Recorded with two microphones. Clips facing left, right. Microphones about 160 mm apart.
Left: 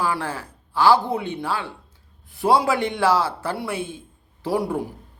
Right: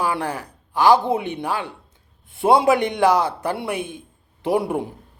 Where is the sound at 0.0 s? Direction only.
20° right (ahead or behind).